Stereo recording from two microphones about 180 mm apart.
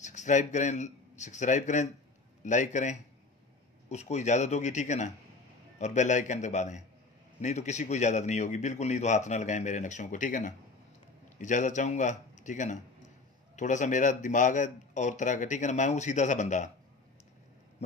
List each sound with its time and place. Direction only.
0.0 s a man's voice: 40° left (ahead or behind)